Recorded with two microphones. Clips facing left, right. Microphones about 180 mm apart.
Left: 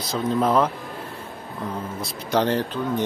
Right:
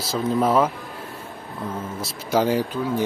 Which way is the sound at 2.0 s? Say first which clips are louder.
Right 1 dB; 5° right (ahead or behind).